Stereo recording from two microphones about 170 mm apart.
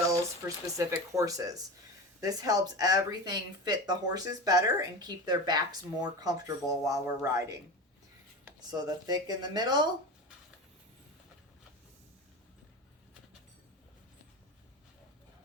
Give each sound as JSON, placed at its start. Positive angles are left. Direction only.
{"t": 0.1, "sound": "speech", "side_deg": -15}
{"t": 8.7, "sound": "speech", "side_deg": -25}